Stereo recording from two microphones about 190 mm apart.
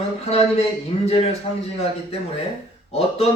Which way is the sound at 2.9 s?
30° left (ahead or behind).